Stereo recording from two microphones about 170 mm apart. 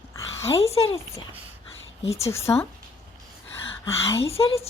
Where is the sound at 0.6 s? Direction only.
35° left (ahead or behind).